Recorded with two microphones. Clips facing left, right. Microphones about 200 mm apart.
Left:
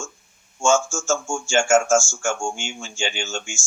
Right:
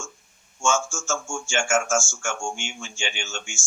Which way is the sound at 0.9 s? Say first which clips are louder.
Left 6 dB; 30° left (ahead or behind).